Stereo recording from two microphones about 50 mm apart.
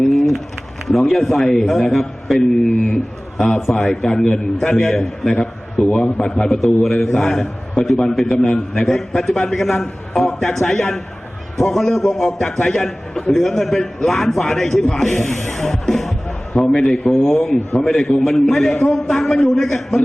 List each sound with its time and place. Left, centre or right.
0.0 s bird: centre
0.9 s a man's voice: centre
9.0 s a man's voice: centre